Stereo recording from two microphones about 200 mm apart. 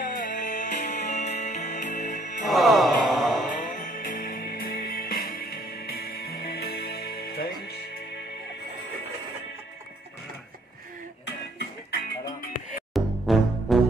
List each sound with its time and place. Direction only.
0.0 s music: 40° left (ahead or behind)
2.4 s music: centre (ahead or behind)
3.5 s music: 40° left (ahead or behind)
12.9 s music: centre (ahead or behind)